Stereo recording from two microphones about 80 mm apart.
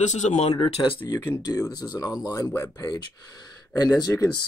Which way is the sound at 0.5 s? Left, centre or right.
Left.